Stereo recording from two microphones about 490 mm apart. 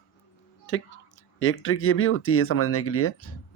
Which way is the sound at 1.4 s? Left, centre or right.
Left.